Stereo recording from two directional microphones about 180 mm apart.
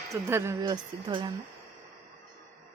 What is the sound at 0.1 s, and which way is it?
Speech, 15° right (ahead or behind).